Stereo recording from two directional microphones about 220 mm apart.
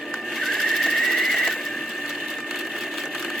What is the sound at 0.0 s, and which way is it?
Sewing machine, centre (ahead or behind).